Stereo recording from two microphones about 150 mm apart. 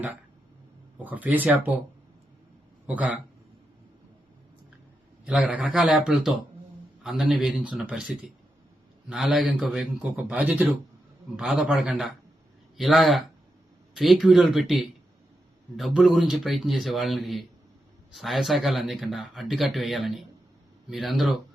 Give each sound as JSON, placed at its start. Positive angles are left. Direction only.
{"t": 1.0, "sound": "a man's voice", "side_deg": -10}
{"t": 2.8, "sound": "a man's voice", "side_deg": -10}
{"t": 5.2, "sound": "a man's voice", "side_deg": -10}